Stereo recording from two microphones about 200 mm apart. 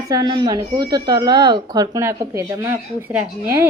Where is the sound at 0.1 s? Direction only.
20° right (ahead or behind).